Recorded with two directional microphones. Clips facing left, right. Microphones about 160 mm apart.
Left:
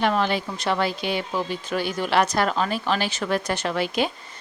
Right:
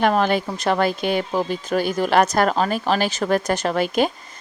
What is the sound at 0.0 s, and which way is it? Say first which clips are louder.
Speech: right 4 dB; 45° right (ahead or behind).